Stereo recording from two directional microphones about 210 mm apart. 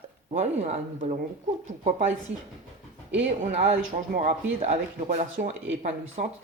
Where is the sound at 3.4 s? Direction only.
30° right (ahead or behind).